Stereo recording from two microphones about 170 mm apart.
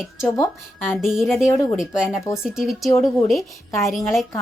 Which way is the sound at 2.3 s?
5° right (ahead or behind).